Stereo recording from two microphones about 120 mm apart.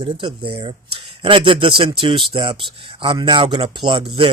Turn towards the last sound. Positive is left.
turn(degrees=-45)  # may be behind; listen again after turning